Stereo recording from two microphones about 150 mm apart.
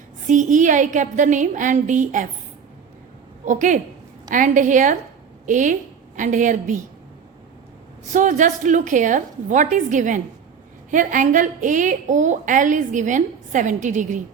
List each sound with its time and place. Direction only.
0.3 s a woman's voice: 55° right (ahead or behind)
3.4 s a woman's voice: 55° right (ahead or behind)
8.1 s a woman's voice: 55° right (ahead or behind)